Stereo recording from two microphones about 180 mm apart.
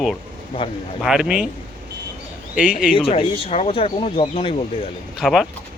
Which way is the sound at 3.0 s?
30° left (ahead or behind).